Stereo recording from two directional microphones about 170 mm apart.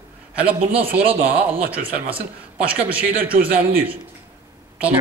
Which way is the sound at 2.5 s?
10° right (ahead or behind).